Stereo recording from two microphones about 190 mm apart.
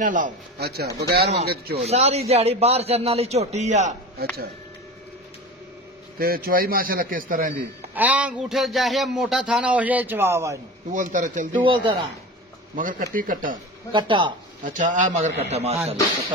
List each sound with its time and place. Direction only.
0.0 s a man's voice: 45° right (ahead or behind)
1.9 s a man's voice: 35° right (ahead or behind)
6.1 s a man's voice: 50° right (ahead or behind)
7.9 s a man's voice: 10° right (ahead or behind)
10.9 s a man's voice: 45° right (ahead or behind)
12.7 s a man's voice: 45° right (ahead or behind)
13.9 s speech: 25° right (ahead or behind)
14.6 s a man's voice: 40° right (ahead or behind)